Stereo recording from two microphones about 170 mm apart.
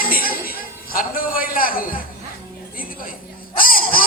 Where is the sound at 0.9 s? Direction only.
55° left (ahead or behind).